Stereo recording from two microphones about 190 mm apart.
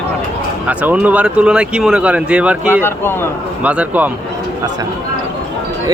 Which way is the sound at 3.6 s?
5° right (ahead or behind).